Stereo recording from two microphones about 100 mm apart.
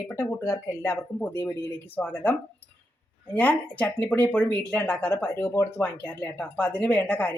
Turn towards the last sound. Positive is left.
turn(degrees=15)  # may be behind; listen again after turning